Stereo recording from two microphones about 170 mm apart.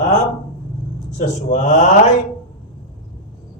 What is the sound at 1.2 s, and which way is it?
Speech, 45° left (ahead or behind).